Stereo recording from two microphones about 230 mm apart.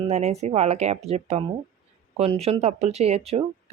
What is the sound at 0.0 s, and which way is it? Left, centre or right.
Speech, right.